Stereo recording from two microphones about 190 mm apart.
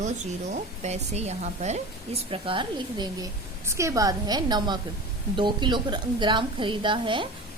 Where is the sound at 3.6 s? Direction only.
15° right (ahead or behind).